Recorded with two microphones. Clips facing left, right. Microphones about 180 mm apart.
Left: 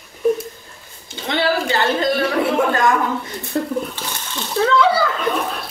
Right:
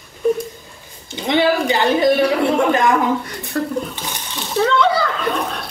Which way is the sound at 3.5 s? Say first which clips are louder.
Even; 20° left (ahead or behind).